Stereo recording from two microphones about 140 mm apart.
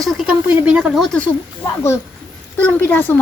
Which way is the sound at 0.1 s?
Centre (ahead or behind).